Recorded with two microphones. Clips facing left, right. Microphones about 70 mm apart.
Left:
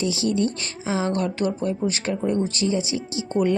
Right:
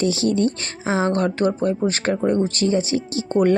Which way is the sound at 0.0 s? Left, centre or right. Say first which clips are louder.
Right 3 dB; right.